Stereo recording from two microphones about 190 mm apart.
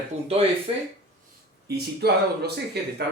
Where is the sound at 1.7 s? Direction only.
60° right (ahead or behind).